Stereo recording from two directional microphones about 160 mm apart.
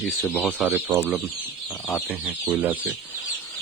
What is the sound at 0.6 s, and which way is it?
Speech, 10° right (ahead or behind).